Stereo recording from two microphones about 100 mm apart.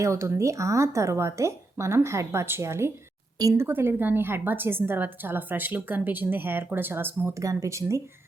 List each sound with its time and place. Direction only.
0.0 s a woman's voice: 30° right (ahead or behind)
3.3 s speech: 35° right (ahead or behind)
3.7 s a woman's voice: 20° right (ahead or behind)
7.3 s speech: 30° right (ahead or behind)